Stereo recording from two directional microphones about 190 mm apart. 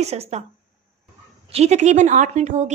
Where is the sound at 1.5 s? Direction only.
35° right (ahead or behind).